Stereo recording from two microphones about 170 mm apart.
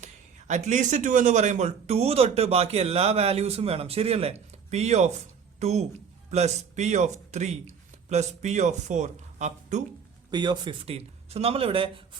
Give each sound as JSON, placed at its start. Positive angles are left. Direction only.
{"t": 0.0, "sound": "speech", "side_deg": -45}
{"t": 10.3, "sound": "speech", "side_deg": -25}